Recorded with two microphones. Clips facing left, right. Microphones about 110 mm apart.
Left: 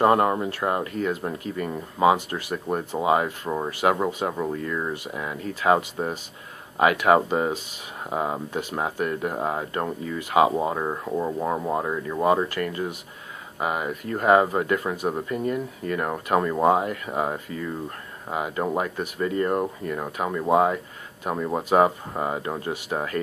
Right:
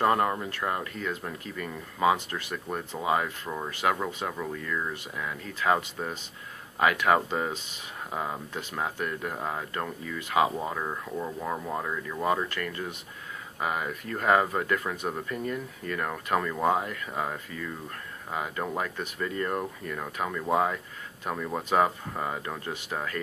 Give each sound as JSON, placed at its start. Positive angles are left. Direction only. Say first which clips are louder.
{"t": 0.0, "sound": "speech", "louder": "left 5 dB", "side_deg": 25}
{"t": 5.5, "sound": "speech", "louder": "left 5 dB", "side_deg": 15}
{"t": 22.8, "sound": "speech", "louder": "left 4 dB", "side_deg": 30}